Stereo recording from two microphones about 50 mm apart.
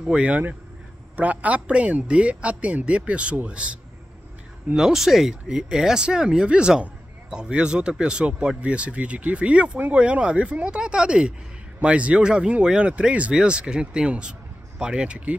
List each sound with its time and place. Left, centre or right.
0.0 s speech: centre
1.1 s a man's voice: right
4.7 s speech: centre